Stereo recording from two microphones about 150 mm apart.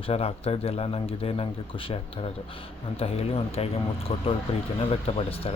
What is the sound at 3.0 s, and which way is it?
Speech, 40° left (ahead or behind).